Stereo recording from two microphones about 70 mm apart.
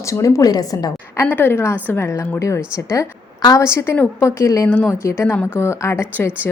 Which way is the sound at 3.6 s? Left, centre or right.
Left.